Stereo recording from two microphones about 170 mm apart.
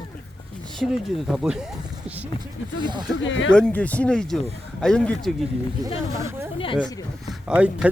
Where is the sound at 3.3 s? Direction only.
90° left.